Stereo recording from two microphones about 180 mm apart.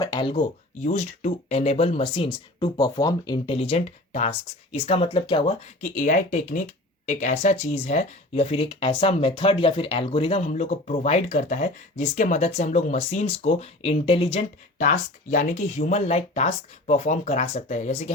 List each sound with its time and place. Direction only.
0.0 s speech: 25° left (ahead or behind)
0.9 s speech: 40° left (ahead or behind)
5.8 s speech: 45° left (ahead or behind); by 14.4 s 30° left (ahead or behind)
14.8 s speech: 45° left (ahead or behind)